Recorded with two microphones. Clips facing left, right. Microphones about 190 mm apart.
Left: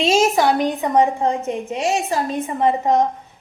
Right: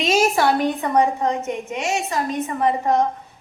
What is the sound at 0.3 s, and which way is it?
Speech, 15° left (ahead or behind).